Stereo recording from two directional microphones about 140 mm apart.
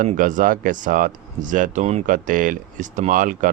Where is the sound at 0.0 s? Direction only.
70° right (ahead or behind); by 2.0 s 50° right (ahead or behind).